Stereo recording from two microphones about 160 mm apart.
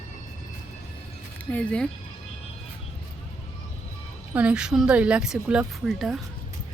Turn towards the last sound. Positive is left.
turn(degrees=0)  # may be behind; listen again after turning